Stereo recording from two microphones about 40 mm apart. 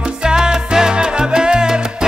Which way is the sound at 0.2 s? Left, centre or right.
Centre.